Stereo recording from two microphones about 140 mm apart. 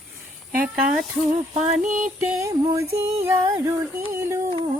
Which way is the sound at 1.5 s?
65° right (ahead or behind).